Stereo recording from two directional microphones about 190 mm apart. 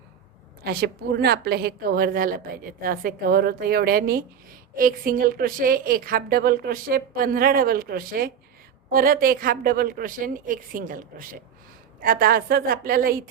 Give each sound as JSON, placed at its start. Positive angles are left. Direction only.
{"t": 0.6, "sound": "a woman's voice", "side_deg": -55}